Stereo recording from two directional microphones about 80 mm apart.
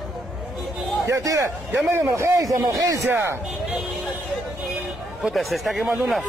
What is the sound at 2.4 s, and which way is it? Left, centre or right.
Speech, right.